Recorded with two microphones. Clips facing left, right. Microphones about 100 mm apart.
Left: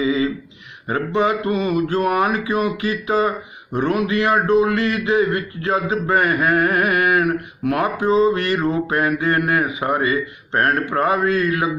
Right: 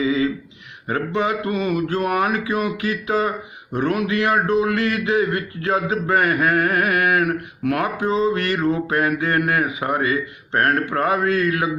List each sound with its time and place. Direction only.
0.0 s a sound: 10° left (ahead or behind)
0.9 s speech: 15° left (ahead or behind)
1.2 s speech: centre (ahead or behind)
7.3 s speech: 20° left (ahead or behind)
7.8 s speech: 5° left (ahead or behind)